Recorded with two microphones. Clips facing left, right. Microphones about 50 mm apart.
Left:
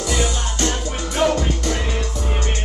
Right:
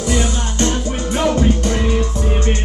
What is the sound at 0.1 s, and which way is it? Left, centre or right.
Music, right.